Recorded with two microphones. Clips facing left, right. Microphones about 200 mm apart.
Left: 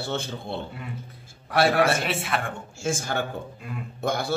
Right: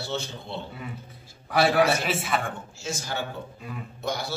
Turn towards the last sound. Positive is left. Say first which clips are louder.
# left 4 dB
turn(degrees=50)  # may be behind; listen again after turning